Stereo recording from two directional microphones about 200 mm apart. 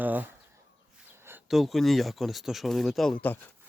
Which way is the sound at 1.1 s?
10° right (ahead or behind).